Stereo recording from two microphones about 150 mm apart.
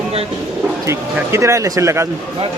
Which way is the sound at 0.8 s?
20° right (ahead or behind).